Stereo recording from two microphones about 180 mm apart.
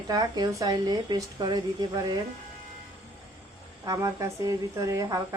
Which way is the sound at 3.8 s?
20° right (ahead or behind).